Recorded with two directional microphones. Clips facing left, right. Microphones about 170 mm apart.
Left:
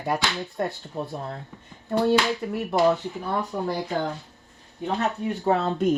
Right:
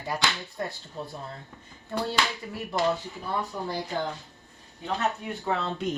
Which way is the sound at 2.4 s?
55° left (ahead or behind).